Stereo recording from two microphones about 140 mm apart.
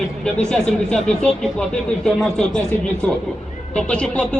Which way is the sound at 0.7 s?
5° left (ahead or behind).